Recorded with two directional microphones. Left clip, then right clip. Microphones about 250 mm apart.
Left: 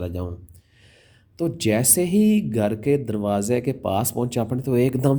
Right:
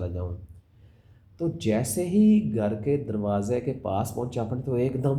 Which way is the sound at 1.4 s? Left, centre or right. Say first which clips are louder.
Left 5 dB; left.